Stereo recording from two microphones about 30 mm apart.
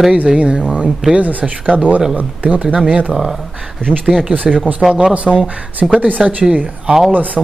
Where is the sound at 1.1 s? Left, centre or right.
Right.